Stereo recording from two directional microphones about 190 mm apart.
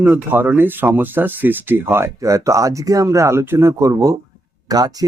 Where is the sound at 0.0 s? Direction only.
10° right (ahead or behind).